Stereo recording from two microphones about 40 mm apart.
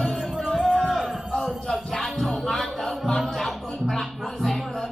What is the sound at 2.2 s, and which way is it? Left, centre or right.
Music, centre.